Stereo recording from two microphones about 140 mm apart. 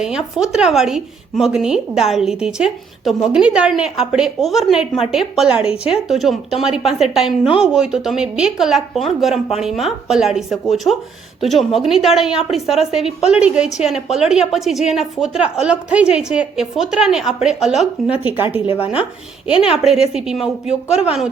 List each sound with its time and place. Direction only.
0.0 s a woman's voice: 5° right (ahead or behind)
18.6 s speech: 40° left (ahead or behind)
19.7 s a woman's voice: 5° right (ahead or behind)